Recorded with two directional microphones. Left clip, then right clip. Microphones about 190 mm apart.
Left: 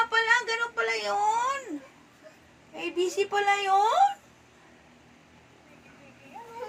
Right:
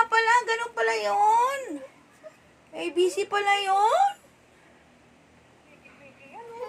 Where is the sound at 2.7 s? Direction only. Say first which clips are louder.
Right 3 dB; 55° right (ahead or behind).